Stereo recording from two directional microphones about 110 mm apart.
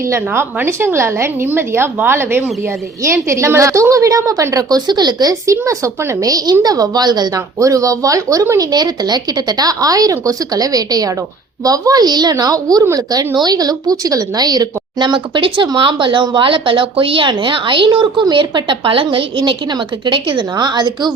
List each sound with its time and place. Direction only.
0.0 s a woman's voice: 25° right (ahead or behind); by 21.1 s 40° right (ahead or behind)